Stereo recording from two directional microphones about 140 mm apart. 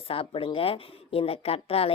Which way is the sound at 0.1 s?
40° left (ahead or behind).